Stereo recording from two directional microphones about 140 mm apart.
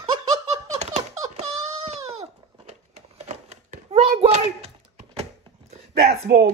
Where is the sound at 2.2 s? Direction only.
50° right (ahead or behind).